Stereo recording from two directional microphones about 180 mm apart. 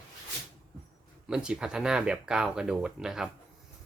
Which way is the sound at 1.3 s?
5° right (ahead or behind).